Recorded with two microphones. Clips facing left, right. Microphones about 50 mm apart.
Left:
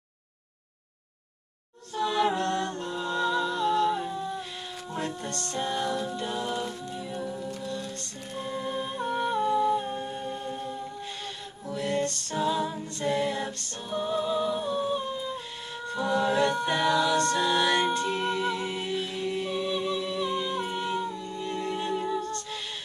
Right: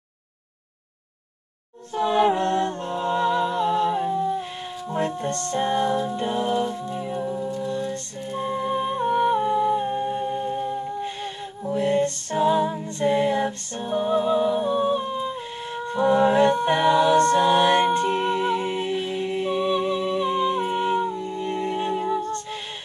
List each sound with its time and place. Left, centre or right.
2.0 s music: right